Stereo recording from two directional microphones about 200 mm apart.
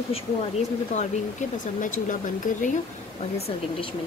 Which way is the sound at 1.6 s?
40° left (ahead or behind).